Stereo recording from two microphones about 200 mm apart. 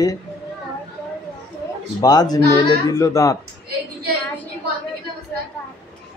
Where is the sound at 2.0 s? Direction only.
20° left (ahead or behind).